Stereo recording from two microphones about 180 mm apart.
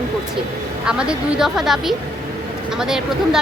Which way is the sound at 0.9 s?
5° right (ahead or behind).